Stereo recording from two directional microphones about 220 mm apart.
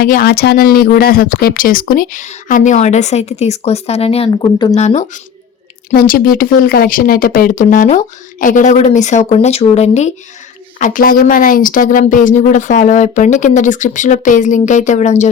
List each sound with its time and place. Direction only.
0.0 s speech: 45° left (ahead or behind); by 4.7 s 20° left (ahead or behind)
4.7 s speech: 30° left (ahead or behind)